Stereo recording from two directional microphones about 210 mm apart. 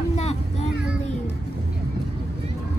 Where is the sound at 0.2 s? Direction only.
30° left (ahead or behind).